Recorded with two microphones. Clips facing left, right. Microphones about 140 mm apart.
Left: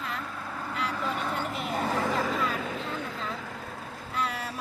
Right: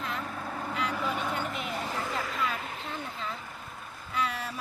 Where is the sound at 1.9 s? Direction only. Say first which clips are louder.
Left 8 dB; 90° left.